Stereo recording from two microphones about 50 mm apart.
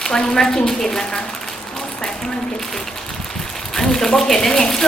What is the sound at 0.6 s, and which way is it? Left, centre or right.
Speech, centre.